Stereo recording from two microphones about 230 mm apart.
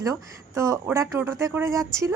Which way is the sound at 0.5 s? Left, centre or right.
Centre.